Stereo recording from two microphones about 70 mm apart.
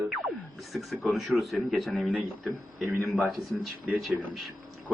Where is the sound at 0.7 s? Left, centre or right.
Centre.